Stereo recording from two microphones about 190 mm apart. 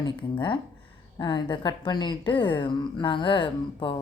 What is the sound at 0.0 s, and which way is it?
A woman's voice, 25° left (ahead or behind).